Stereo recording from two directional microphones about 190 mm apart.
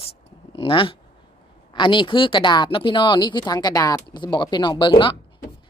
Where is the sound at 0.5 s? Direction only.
25° left (ahead or behind).